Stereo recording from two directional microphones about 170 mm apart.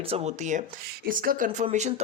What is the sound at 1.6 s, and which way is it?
Speech, 40° right (ahead or behind).